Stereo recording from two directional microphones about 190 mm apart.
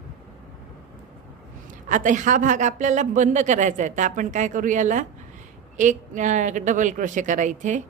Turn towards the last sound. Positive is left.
turn(degrees=-40)  # may be behind; listen again after turning